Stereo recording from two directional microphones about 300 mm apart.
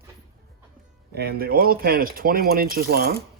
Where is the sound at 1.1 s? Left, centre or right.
Right.